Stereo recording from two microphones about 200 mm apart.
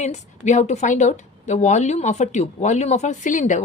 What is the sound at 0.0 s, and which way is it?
A woman's voice, 35° left (ahead or behind).